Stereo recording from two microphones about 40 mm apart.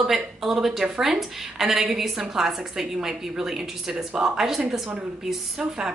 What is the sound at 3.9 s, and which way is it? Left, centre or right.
Speech, right.